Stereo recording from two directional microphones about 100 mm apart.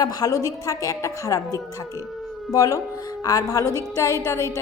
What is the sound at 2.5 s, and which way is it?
A woman's voice, 35° left (ahead or behind).